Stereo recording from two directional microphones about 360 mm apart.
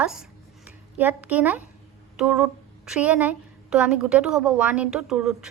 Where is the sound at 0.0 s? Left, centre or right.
Centre.